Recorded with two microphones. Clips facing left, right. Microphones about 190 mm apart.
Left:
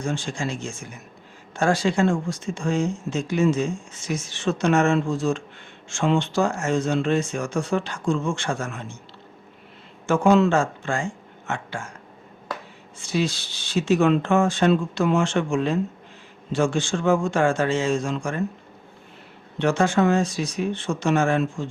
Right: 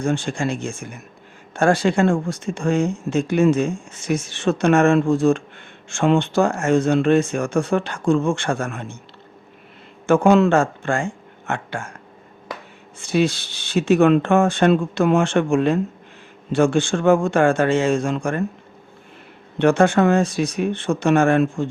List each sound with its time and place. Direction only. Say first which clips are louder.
0.0 s speech: right 5 dB; 55° right (ahead or behind)
10.1 s speech: right 3 dB; 55° right (ahead or behind)
13.0 s speech: right 5 dB; 60° right (ahead or behind)
19.5 s speech: right 5 dB; 60° right (ahead or behind)